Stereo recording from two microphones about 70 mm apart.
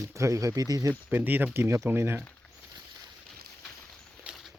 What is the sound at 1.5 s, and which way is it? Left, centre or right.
Speech, right.